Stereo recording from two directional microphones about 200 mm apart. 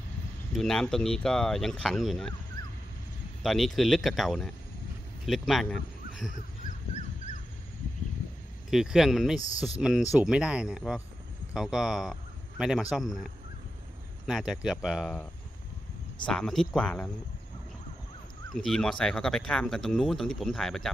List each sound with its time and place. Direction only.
0.6 s speech: 5° left (ahead or behind)
3.4 s speech: centre (ahead or behind)
7.3 s a sound: 40° left (ahead or behind)
8.6 s speech: centre (ahead or behind)
16.3 s speech: 5° left (ahead or behind)
18.5 s speech: centre (ahead or behind)